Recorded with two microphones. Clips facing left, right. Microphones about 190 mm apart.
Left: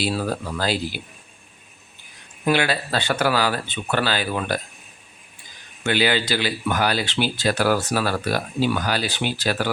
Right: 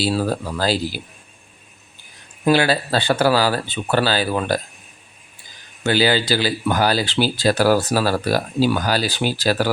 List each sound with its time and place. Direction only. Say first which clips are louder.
0.0 s speech: right 4 dB; 35° right (ahead or behind)
2.4 s speech: right 4 dB; 35° right (ahead or behind)
5.8 s speech: right 3 dB; 35° right (ahead or behind)